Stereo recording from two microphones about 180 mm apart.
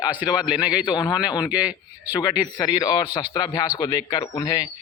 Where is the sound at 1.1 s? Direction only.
5° right (ahead or behind).